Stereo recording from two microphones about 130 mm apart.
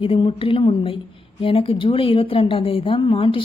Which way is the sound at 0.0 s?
45° left (ahead or behind).